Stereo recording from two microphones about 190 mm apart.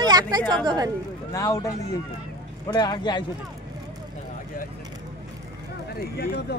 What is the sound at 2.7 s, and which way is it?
Speech, 20° left (ahead or behind).